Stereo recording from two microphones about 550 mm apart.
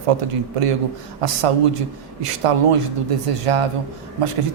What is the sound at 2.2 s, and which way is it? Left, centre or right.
A man's voice, right.